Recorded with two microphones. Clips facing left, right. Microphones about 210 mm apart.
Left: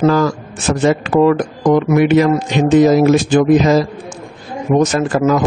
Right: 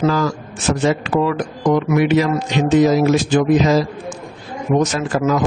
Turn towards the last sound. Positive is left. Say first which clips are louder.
# left 4 dB
turn(degrees=50)  # may be behind; listen again after turning